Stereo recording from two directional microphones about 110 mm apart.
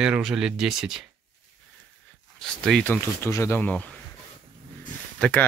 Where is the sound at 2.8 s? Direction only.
15° left (ahead or behind).